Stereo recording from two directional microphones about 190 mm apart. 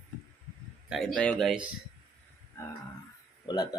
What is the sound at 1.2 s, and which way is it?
Speech, 5° left (ahead or behind).